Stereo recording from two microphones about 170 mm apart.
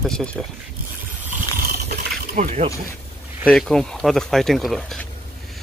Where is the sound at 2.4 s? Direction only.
50° right (ahead or behind).